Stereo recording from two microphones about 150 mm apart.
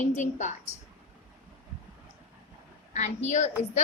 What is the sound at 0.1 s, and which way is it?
Speech, 55° left (ahead or behind).